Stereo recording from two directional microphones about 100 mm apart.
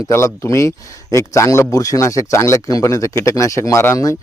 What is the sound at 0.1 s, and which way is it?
Speech, 30° left (ahead or behind).